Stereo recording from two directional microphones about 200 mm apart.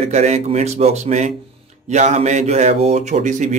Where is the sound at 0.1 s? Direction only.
35° right (ahead or behind).